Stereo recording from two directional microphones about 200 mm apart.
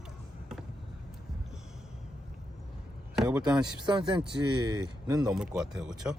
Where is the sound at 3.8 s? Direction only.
25° right (ahead or behind).